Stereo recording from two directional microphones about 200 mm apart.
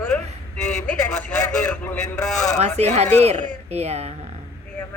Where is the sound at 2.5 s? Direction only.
35° right (ahead or behind).